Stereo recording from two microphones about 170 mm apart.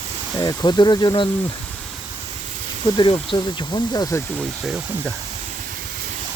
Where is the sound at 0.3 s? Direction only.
25° left (ahead or behind).